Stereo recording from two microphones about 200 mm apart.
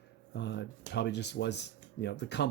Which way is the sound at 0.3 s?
60° left (ahead or behind).